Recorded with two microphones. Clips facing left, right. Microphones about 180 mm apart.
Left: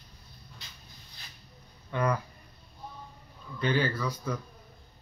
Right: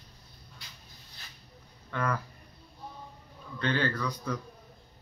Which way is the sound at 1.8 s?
15° left (ahead or behind).